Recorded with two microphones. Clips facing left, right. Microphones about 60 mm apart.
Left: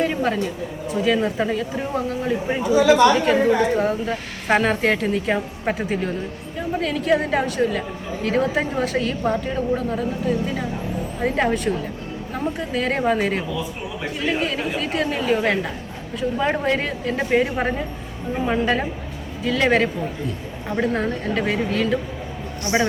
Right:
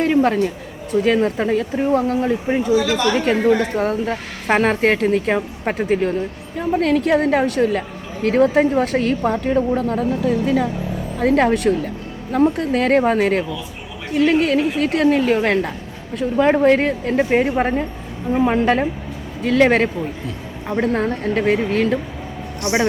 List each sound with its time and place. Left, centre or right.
0.0 s a woman's voice: right
2.6 s speech: left
3.8 s a woman's voice: right
17.3 s a woman's voice: right
18.3 s a woman's voice: right
22.7 s a man's voice: right